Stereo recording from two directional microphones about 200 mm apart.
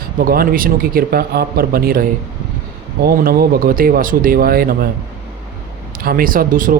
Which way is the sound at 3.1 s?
50° right (ahead or behind).